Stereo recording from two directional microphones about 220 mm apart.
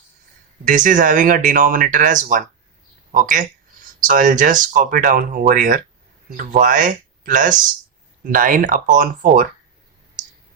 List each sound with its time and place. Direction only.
0.6 s speech: 35° right (ahead or behind)